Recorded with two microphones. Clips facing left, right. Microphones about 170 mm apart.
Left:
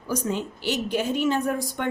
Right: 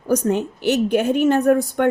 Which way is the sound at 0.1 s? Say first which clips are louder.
Right 8 dB; 60° right (ahead or behind).